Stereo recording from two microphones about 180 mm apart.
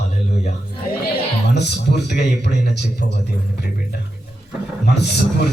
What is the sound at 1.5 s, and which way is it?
Speech, 70° left (ahead or behind).